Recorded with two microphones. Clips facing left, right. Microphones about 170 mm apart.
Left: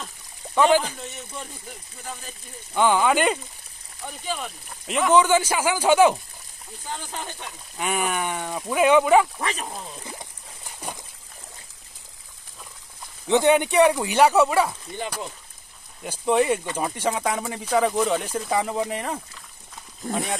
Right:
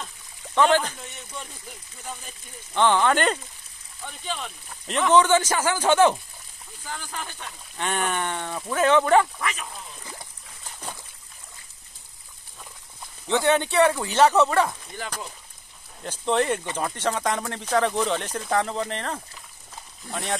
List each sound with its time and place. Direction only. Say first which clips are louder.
0.6 s speech: left 1 dB; 10° left (ahead or behind)
6.9 s speech: left 2 dB; 20° left (ahead or behind)
9.4 s speech: left 2 dB; 35° left (ahead or behind)
10.8 s a sound: left 3 dB; 10° left (ahead or behind)
13.3 s speech: left 3 dB; 15° left (ahead or behind)
16.0 s speech: left 3 dB; 10° left (ahead or behind)
20.0 s speech: left 6 dB; 45° left (ahead or behind)